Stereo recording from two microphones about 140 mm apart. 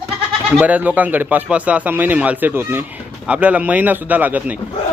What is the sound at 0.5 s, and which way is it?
Speech, 10° right (ahead or behind).